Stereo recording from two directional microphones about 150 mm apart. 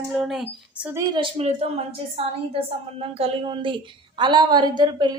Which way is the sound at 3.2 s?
35° right (ahead or behind).